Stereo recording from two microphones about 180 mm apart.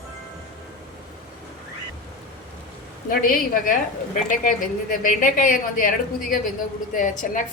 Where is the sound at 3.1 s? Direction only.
50° left (ahead or behind).